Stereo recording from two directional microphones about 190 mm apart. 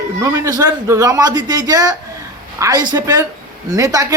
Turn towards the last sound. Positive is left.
turn(degrees=-15)  # may be behind; listen again after turning